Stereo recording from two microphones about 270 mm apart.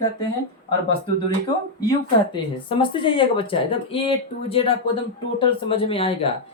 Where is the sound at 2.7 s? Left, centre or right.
Centre.